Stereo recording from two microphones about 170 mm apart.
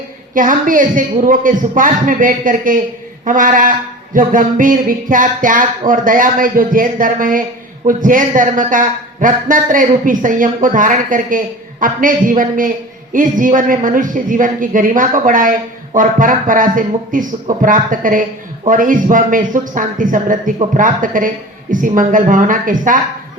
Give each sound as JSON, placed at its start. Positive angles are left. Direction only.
{"t": 0.3, "sound": "a man's voice", "side_deg": -50}